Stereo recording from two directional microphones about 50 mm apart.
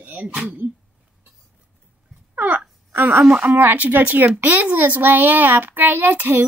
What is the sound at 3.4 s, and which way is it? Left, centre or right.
A child's voice, right.